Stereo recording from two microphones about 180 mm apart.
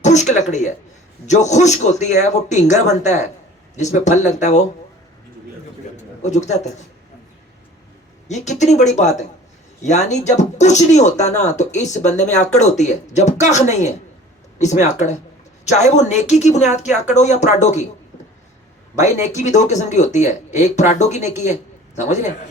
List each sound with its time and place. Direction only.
0.0 s speech: 40° left (ahead or behind)
6.0 s a man's voice: 40° left (ahead or behind)
8.3 s speech: 40° left (ahead or behind)
19.2 s speech: 40° left (ahead or behind)